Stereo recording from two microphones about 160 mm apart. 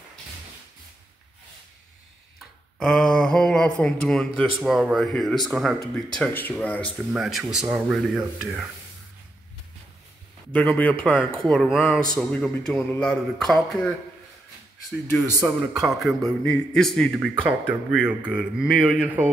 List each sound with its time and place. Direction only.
2.8 s mantra: 5° left (ahead or behind)
3.8 s a man's voice: 5° left (ahead or behind)
7.2 s a man's voice: 5° right (ahead or behind)
10.5 s a man's voice: 10° left (ahead or behind)
15.1 s speech: 20° right (ahead or behind)
15.8 s a man's voice: centre (ahead or behind)